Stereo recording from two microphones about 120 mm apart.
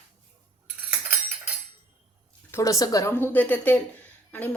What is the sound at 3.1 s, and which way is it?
A woman's voice, 15° left (ahead or behind).